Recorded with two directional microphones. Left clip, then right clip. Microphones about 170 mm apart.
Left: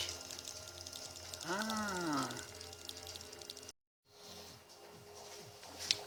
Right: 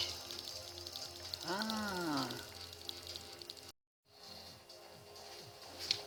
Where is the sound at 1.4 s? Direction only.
5° left (ahead or behind).